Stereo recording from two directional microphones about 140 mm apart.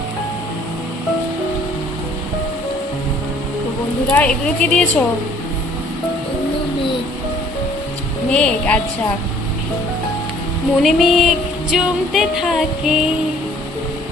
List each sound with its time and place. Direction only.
4.1 s a woman's voice: 10° left (ahead or behind)
8.3 s a woman's voice: 10° left (ahead or behind)
10.8 s music: centre (ahead or behind)